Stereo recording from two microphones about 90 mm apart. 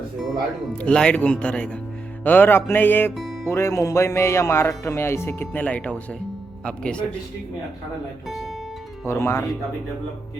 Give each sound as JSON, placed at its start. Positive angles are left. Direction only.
{"t": 0.7, "sound": "speech", "side_deg": 10}
{"t": 2.2, "sound": "music", "side_deg": 20}
{"t": 3.2, "sound": "music", "side_deg": -5}
{"t": 3.5, "sound": "speech", "side_deg": 30}
{"t": 4.8, "sound": "music", "side_deg": 30}
{"t": 5.6, "sound": "speech", "side_deg": 15}
{"t": 8.3, "sound": "speech", "side_deg": 0}
{"t": 9.0, "sound": "music", "side_deg": 30}